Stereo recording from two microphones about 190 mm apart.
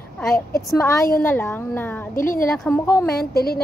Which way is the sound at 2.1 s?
45° left (ahead or behind).